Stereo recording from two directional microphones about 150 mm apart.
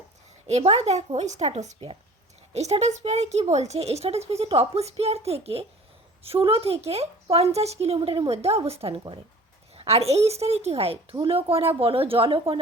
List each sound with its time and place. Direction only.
0.4 s a woman's voice: 45° right (ahead or behind)